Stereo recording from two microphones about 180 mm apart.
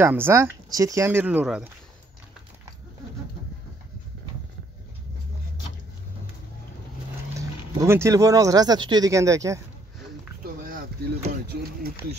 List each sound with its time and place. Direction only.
0.0 s speech: 10° right (ahead or behind)
7.3 s speech: 15° right (ahead or behind)